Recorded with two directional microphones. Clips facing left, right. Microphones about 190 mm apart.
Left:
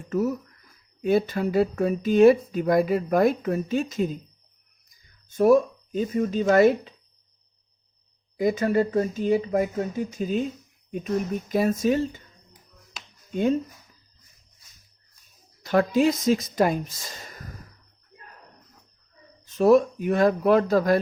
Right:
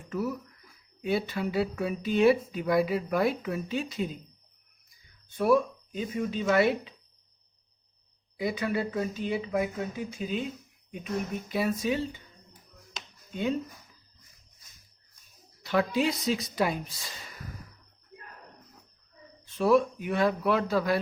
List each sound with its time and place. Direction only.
0.1 s speech: 45° left (ahead or behind)
5.3 s speech: 45° left (ahead or behind)
8.4 s speech: 45° left (ahead or behind)
13.3 s speech: 45° left (ahead or behind)
15.6 s speech: 45° left (ahead or behind)
19.5 s speech: 45° left (ahead or behind)